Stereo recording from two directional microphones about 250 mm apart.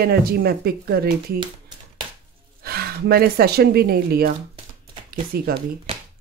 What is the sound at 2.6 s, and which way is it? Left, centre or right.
Speech, right.